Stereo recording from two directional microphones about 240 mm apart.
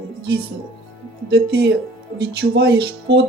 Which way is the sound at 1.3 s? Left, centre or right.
Right.